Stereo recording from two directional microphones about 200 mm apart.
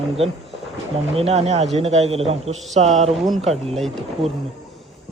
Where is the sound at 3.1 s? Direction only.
Centre (ahead or behind).